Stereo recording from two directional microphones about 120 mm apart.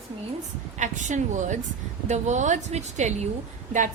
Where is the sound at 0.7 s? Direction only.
90° right; by 3.3 s 75° right (ahead or behind).